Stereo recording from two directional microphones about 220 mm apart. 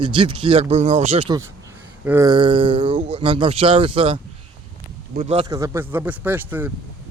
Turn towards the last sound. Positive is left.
turn(degrees=-10)  # may be behind; listen again after turning